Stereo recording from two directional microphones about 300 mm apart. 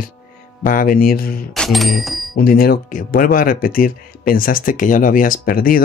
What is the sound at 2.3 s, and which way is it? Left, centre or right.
Speech, left.